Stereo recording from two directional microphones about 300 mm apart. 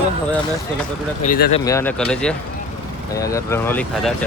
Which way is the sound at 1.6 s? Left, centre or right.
Centre.